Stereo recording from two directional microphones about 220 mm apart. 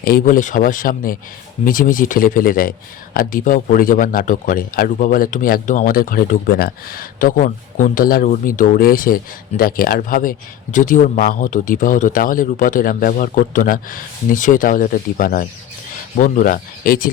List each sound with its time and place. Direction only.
0.0 s speech: 40° left (ahead or behind)